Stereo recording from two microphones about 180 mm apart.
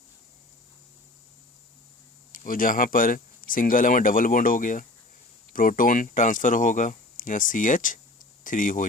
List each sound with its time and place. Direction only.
2.3 s speech: 50° left (ahead or behind)